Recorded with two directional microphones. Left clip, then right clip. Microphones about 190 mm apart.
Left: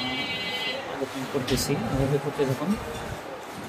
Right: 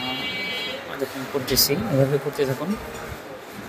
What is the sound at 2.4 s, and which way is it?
Speech, 30° right (ahead or behind).